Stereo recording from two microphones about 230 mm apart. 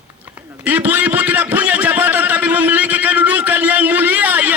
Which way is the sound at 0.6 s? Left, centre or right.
Centre.